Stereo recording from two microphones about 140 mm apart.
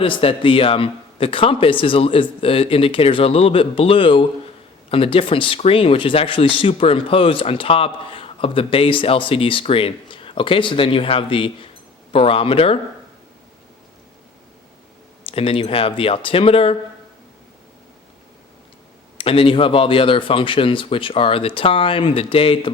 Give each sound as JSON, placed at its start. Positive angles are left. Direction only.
{"t": 0.0, "sound": "a man's voice", "side_deg": 40}
{"t": 15.2, "sound": "a man's voice", "side_deg": 40}
{"t": 19.1, "sound": "a man's voice", "side_deg": 40}